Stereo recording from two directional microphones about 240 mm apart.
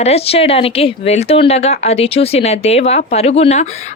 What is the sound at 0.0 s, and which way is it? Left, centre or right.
Speech, left.